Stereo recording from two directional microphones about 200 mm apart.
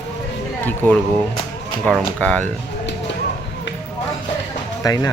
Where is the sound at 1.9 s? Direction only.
5° left (ahead or behind).